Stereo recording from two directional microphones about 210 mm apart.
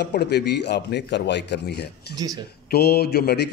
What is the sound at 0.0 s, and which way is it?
A man's voice, 50° left (ahead or behind).